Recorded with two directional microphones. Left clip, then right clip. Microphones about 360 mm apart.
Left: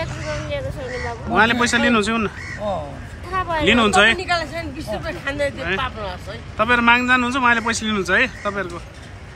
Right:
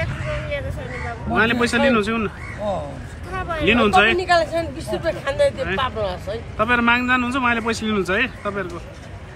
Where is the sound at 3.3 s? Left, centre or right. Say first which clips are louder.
Left 4 dB; left.